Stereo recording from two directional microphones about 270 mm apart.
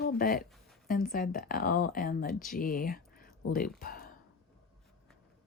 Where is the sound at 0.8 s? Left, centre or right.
Left.